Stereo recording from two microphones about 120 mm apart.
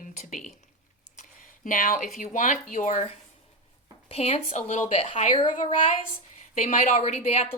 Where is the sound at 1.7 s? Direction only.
90° left.